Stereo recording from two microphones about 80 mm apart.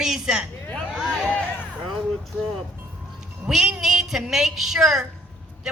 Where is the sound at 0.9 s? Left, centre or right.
Centre.